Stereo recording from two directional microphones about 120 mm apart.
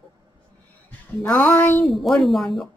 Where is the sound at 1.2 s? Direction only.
15° left (ahead or behind).